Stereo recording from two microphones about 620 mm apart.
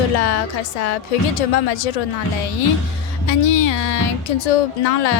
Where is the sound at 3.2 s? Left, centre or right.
Left.